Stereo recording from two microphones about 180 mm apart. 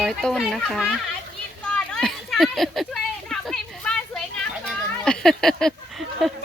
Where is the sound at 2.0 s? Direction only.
Centre (ahead or behind).